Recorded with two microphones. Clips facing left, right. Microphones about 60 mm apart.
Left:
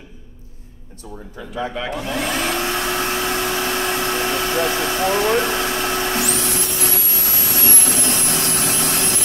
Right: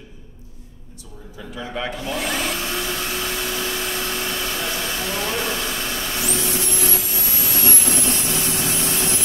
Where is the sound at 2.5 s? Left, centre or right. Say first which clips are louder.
Left 5 dB; left.